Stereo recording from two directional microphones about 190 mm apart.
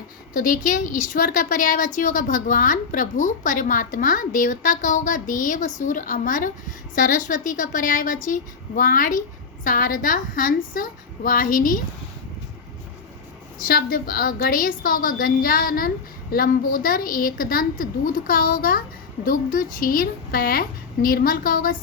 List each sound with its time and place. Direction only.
0.3 s a woman's voice: 45° left (ahead or behind)
13.7 s a woman's voice: 50° left (ahead or behind)